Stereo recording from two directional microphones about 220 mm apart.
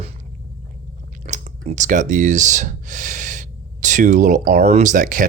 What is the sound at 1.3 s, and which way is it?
Speech, 35° right (ahead or behind).